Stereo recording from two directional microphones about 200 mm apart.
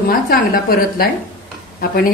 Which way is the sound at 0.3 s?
45° left (ahead or behind).